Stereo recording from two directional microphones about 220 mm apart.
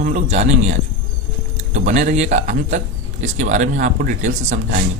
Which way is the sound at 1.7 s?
35° right (ahead or behind).